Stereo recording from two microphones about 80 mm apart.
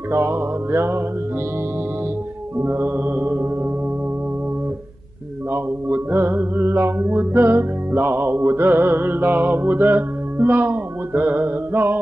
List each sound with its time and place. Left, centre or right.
0.1 s music: right
2.6 s music: right
5.5 s music: right